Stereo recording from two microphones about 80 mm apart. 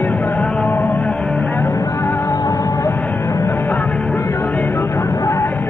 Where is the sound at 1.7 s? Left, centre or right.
Left.